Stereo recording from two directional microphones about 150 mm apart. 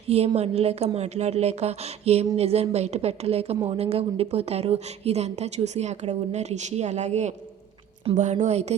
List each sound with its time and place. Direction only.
0.1 s a woman's voice: 45° right (ahead or behind)